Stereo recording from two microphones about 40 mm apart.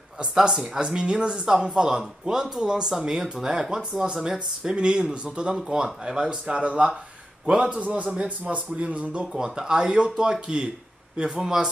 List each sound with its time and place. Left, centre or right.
0.3 s speech: centre; by 9.2 s right
9.4 s speech: right